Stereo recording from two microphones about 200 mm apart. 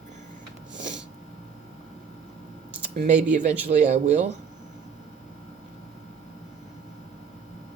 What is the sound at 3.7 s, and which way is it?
Speech, 35° right (ahead or behind).